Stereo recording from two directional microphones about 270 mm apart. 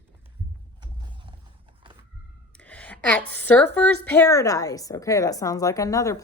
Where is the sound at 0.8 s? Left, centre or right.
Centre.